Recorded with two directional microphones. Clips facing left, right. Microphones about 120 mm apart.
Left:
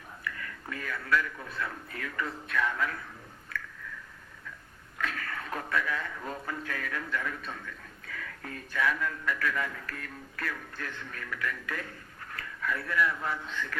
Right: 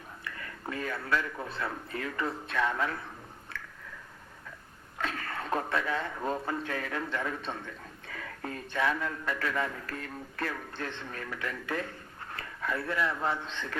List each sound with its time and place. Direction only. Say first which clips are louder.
0.3 s a man's voice: even; 30° right (ahead or behind)
3.5 s squish: left 5 dB; 25° right (ahead or behind)
4.9 s a man's voice: right 1 dB; 30° right (ahead or behind)